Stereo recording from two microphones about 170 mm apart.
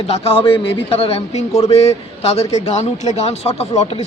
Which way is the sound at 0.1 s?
35° left (ahead or behind).